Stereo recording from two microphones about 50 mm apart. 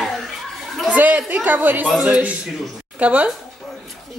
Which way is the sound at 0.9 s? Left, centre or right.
Right.